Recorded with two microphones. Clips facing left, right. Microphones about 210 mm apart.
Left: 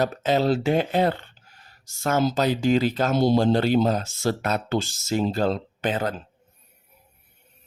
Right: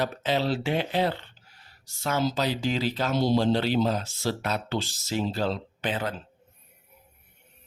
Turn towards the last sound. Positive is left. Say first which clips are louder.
# left 4 dB
turn(degrees=45)  # may be behind; listen again after turning